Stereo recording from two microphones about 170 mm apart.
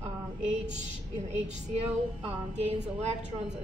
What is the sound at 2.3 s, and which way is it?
Speech, 35° right (ahead or behind).